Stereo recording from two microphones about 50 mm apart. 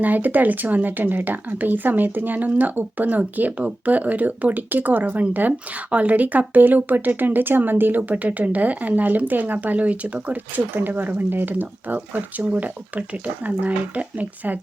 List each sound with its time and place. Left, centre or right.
0.0 s speech: right
10.8 s speech: right